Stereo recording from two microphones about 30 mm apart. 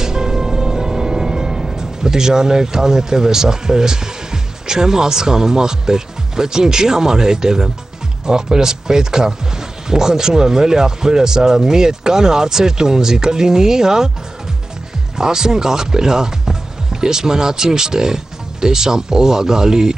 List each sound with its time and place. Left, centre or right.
0.0 s music: centre
8.3 s speech: right
15.1 s speech: centre